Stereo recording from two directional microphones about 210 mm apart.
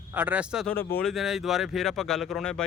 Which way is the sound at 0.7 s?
10° left (ahead or behind).